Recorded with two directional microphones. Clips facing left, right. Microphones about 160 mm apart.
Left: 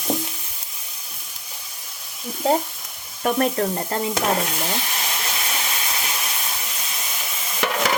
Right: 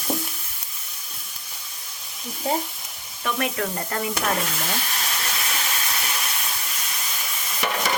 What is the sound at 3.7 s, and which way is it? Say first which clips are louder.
Stir: left 3 dB; 25° left (ahead or behind).